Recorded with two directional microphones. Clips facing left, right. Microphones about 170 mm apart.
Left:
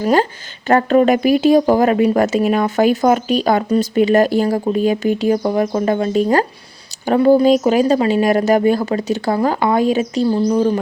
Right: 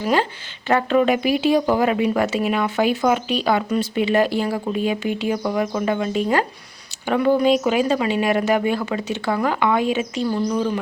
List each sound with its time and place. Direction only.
0.0 s speech: 45° left (ahead or behind)